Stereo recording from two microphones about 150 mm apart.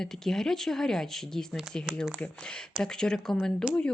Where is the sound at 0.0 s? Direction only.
5° left (ahead or behind).